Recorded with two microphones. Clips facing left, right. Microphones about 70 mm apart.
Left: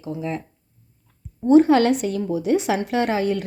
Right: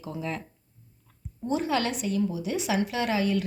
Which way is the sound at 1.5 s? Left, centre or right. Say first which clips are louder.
Left 13 dB; left.